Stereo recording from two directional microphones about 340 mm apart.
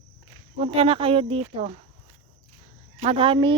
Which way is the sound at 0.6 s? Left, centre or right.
Centre.